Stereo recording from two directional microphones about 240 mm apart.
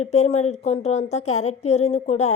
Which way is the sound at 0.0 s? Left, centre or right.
Left.